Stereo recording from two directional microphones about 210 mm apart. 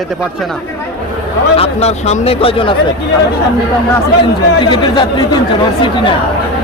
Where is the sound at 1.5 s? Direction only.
30° left (ahead or behind).